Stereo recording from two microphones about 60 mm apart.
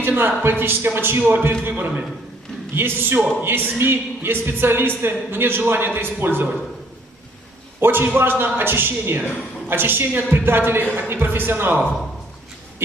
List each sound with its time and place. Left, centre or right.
0.0 s speech: right
7.8 s speech: right